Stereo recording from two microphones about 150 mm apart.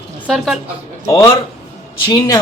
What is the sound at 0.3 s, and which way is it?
Speech, centre (ahead or behind).